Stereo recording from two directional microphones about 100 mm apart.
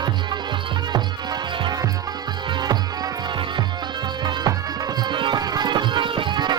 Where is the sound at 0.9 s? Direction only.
45° right (ahead or behind).